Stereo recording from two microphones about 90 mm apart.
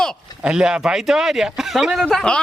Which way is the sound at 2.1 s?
10° left (ahead or behind).